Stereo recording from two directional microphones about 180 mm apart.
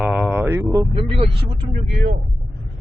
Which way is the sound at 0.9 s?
30° right (ahead or behind).